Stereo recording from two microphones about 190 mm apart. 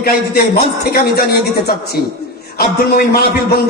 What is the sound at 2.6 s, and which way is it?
Speech, 55° left (ahead or behind).